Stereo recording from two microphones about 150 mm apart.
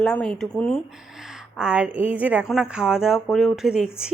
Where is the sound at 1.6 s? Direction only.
5° right (ahead or behind).